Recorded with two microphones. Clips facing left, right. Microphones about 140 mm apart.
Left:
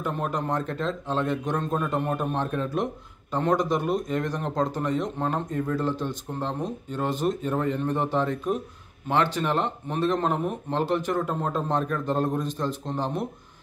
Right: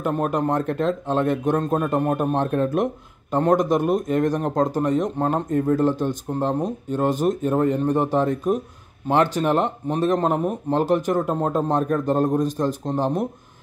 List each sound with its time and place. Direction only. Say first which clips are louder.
0.0 s speech: right 6 dB; 50° right (ahead or behind)